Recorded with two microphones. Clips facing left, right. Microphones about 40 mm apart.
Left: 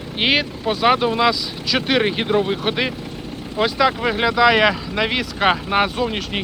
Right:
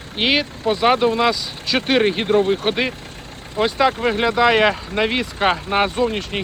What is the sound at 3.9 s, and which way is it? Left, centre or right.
Speech, left.